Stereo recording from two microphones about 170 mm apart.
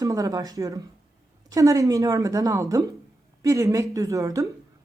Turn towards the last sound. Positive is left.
turn(degrees=-20)  # may be behind; listen again after turning